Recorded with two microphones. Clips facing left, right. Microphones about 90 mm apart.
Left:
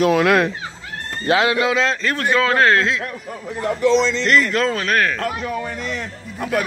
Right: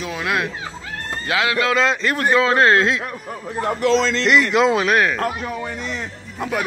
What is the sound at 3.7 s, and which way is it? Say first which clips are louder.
Speech: left 2 dB; 90° right.